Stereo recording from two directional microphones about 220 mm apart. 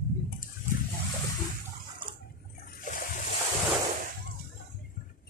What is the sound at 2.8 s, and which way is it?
Splash, 35° left (ahead or behind).